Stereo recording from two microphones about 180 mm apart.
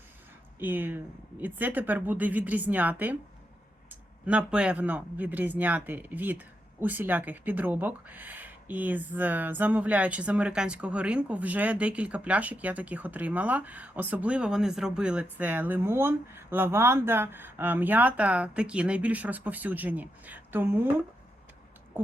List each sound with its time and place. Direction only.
0.6 s speech: 10° right (ahead or behind)